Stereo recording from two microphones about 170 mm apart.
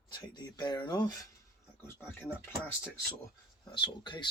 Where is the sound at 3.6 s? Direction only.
25° left (ahead or behind).